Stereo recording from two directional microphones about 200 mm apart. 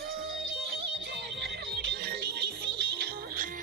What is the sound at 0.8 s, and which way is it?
Music, 60° right (ahead or behind).